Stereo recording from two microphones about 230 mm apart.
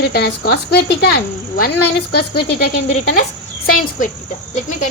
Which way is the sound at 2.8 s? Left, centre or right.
Left.